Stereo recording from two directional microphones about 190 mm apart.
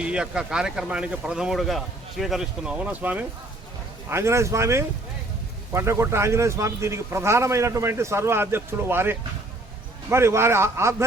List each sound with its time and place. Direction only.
0.0 s speech: 5° right (ahead or behind)